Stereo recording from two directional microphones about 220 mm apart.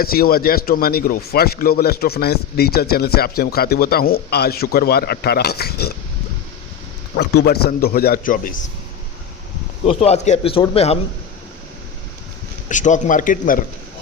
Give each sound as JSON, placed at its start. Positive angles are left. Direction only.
{"t": 0.0, "sound": "a man's voice", "side_deg": 40}
{"t": 7.2, "sound": "a man's voice", "side_deg": 45}
{"t": 9.8, "sound": "a man's voice", "side_deg": 25}
{"t": 12.6, "sound": "speech", "side_deg": 35}